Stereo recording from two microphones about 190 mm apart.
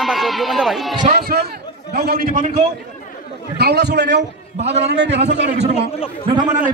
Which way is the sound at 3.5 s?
60° right (ahead or behind).